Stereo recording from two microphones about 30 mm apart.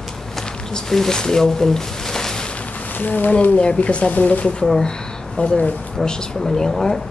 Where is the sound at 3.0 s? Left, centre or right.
Left.